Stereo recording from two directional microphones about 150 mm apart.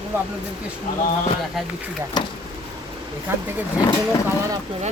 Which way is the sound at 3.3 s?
15° right (ahead or behind).